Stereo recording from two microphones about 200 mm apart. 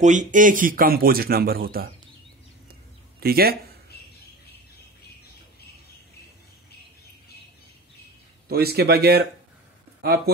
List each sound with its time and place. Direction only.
0.0 s a man's voice: 40° right (ahead or behind)
2.7 s a sound: 50° right (ahead or behind)
8.5 s a man's voice: 50° right (ahead or behind)